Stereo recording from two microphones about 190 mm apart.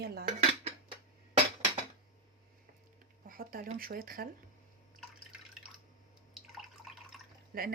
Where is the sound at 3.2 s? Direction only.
50° right (ahead or behind).